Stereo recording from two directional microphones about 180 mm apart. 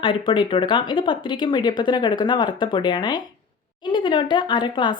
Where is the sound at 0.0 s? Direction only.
30° left (ahead or behind).